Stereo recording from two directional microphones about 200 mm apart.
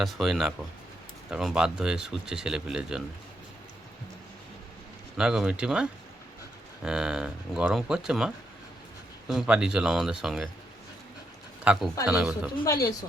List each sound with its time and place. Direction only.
0.0 s speech: centre (ahead or behind)
5.1 s speech: 5° right (ahead or behind)
11.6 s speech: 5° right (ahead or behind)
12.6 s speech: 15° left (ahead or behind)